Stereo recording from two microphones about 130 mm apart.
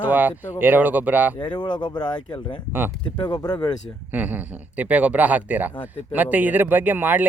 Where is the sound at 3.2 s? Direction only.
35° left (ahead or behind).